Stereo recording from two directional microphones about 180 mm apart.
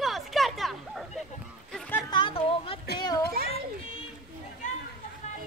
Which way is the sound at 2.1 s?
30° left (ahead or behind).